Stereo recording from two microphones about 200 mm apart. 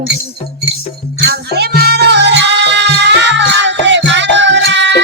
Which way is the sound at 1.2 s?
55° right (ahead or behind).